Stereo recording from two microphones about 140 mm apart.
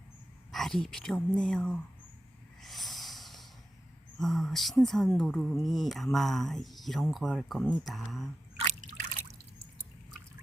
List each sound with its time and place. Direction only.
0.5 s speech: centre (ahead or behind)
2.6 s snort: centre (ahead or behind)
4.2 s speech: centre (ahead or behind)
8.8 s trickle: 65° right (ahead or behind)